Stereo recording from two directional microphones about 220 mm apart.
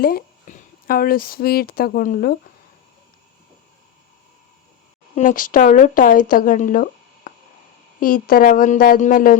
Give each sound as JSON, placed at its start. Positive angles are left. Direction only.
{"t": 0.0, "sound": "speech", "side_deg": 40}
{"t": 5.1, "sound": "a woman's voice", "side_deg": 35}